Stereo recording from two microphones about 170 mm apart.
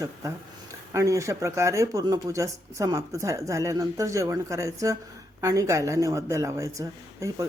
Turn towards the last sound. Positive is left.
turn(degrees=-20)  # may be behind; listen again after turning